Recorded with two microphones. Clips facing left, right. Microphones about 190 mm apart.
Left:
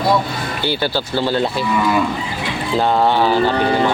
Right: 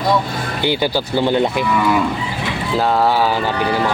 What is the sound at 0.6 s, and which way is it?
Speech, 15° right (ahead or behind).